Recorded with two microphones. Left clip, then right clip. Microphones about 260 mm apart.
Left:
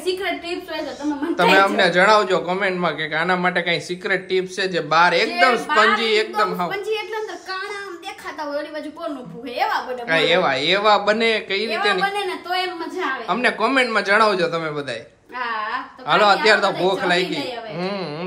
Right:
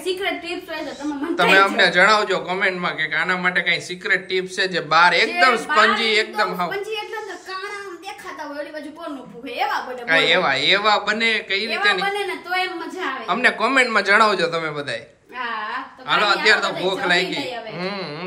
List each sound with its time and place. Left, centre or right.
1.0 s speech: centre
10.0 s speech: centre
12.5 s a woman's voice: centre
13.3 s speech: centre
16.1 s a man's voice: left